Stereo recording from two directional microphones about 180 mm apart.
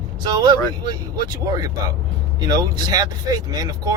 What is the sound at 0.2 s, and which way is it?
Speech, 25° right (ahead or behind).